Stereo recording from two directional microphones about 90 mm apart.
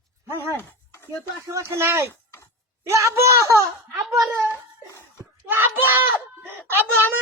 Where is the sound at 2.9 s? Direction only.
30° right (ahead or behind).